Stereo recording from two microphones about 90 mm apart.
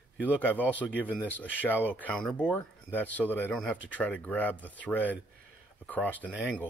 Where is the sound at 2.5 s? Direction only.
20° left (ahead or behind).